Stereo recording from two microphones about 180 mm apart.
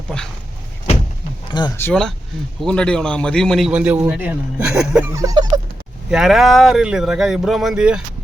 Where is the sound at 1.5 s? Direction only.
25° left (ahead or behind).